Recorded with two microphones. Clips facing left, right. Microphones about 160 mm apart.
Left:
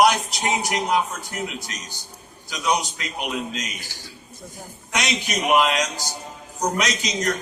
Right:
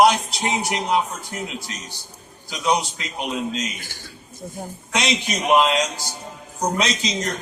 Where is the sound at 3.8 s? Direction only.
55° right (ahead or behind).